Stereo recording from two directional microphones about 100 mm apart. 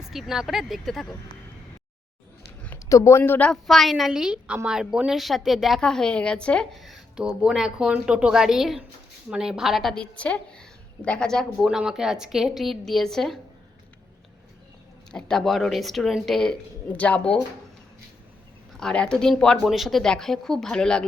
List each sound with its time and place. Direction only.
0.1 s a woman's voice: 5° right (ahead or behind)
2.7 s speech: 30° left (ahead or behind)
3.5 s a woman's voice: 5° left (ahead or behind)
6.7 s a woman's voice: centre (ahead or behind)
9.9 s a woman's voice: 10° left (ahead or behind)
15.1 s a woman's voice: 5° left (ahead or behind)
18.8 s a woman's voice: 5° left (ahead or behind)